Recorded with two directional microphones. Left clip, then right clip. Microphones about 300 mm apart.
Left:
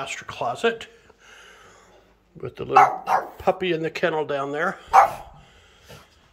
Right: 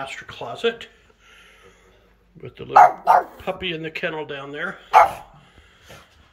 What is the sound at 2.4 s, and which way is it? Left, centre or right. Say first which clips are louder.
Speech: right 4 dB; centre.